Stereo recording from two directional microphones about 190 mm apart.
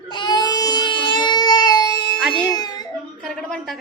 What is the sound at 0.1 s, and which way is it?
Baby cry, 25° left (ahead or behind).